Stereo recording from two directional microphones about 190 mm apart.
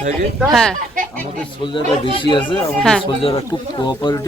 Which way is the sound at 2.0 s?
25° left (ahead or behind).